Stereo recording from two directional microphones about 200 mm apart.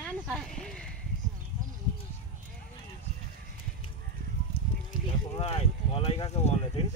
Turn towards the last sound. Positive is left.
turn(degrees=25)  # may be behind; listen again after turning